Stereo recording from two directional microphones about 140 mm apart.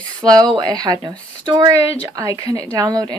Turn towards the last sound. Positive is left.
turn(degrees=-25)  # may be behind; listen again after turning